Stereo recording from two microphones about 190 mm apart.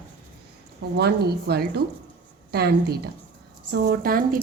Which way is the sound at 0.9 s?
55° right (ahead or behind).